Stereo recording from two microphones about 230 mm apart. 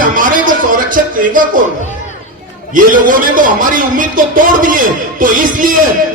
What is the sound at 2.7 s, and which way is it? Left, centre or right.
A man's voice, right.